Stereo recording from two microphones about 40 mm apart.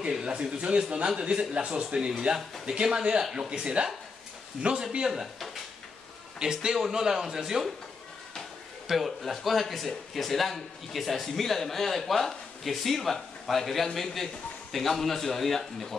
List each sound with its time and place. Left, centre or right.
0.1 s speech: right
5.2 s speech: centre
6.4 s speech: centre
8.8 s speech: centre